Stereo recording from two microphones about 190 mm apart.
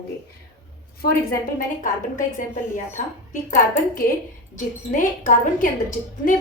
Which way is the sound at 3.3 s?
45° left (ahead or behind).